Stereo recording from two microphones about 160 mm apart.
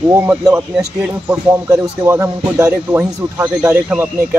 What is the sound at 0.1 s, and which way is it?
Speech, 15° right (ahead or behind).